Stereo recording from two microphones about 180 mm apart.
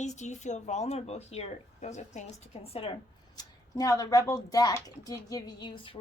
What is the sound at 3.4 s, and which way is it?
Speech, 20° left (ahead or behind).